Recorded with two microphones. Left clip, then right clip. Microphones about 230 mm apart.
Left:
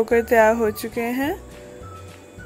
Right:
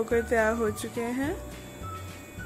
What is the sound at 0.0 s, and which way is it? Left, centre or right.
Speech, left.